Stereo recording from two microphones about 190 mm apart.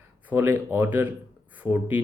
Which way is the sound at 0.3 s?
10° right (ahead or behind).